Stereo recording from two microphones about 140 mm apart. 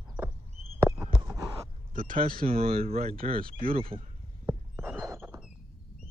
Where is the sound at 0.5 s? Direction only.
50° right (ahead or behind).